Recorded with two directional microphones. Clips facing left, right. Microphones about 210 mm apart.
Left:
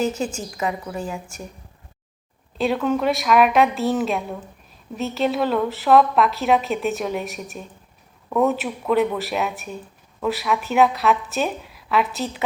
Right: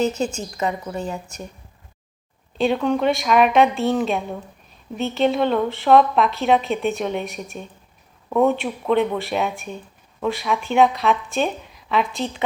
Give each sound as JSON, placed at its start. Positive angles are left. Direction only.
{"t": 0.2, "sound": "a woman's voice", "side_deg": 5}
{"t": 2.6, "sound": "a woman's voice", "side_deg": 0}